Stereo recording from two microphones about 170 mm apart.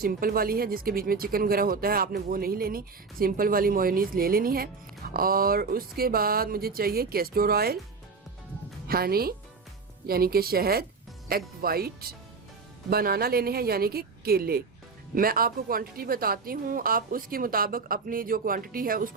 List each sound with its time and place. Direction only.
0.0 s speech: 60° right (ahead or behind)
8.9 s speech: 65° right (ahead or behind)